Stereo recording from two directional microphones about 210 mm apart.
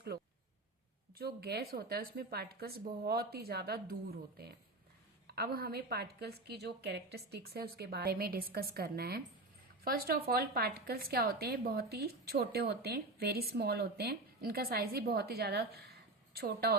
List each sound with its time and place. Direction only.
1.2 s a woman's voice: 50° right (ahead or behind)
5.3 s a woman's voice: 50° right (ahead or behind)